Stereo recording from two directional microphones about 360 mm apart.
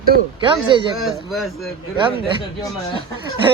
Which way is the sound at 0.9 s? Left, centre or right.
Centre.